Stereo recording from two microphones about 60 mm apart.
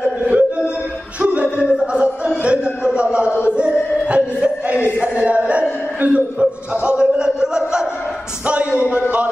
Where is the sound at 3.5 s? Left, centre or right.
Centre.